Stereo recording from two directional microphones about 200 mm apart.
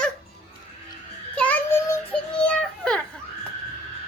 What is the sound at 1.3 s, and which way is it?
A child's voice, 10° left (ahead or behind).